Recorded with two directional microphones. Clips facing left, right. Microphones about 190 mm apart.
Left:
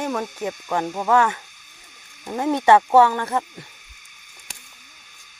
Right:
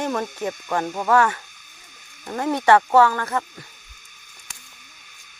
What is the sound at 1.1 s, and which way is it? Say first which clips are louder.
Speech: even; 15° left (ahead or behind).